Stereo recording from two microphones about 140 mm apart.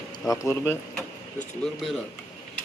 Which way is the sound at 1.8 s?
Centre (ahead or behind).